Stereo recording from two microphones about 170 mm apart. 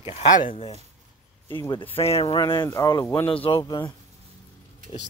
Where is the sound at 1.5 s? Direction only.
25° left (ahead or behind).